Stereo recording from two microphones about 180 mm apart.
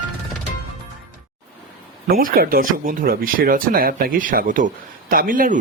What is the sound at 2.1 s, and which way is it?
Speech, 55° right (ahead or behind).